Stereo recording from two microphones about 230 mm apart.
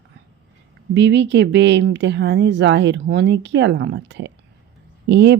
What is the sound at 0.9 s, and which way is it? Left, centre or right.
Speech, right.